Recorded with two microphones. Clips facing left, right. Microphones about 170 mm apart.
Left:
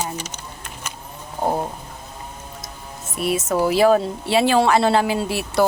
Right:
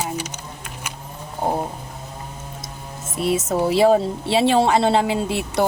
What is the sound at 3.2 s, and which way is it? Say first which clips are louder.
A woman's voice: even; 25° right (ahead or behind).